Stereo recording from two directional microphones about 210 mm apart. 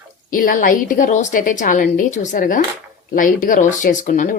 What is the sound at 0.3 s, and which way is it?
A woman's voice, 40° left (ahead or behind).